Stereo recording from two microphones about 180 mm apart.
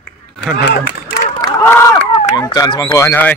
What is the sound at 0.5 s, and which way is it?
Speech, 70° left (ahead or behind).